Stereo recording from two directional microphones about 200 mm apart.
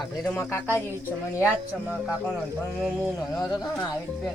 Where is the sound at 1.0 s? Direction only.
10° right (ahead or behind).